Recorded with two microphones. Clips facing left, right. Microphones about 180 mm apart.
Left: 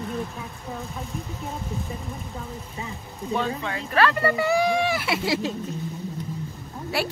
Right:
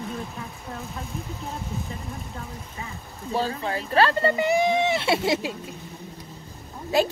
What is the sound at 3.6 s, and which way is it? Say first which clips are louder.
Speech: right 3 dB; 30° right (ahead or behind).